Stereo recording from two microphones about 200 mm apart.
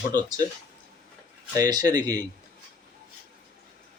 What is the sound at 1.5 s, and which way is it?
Speech, 20° right (ahead or behind).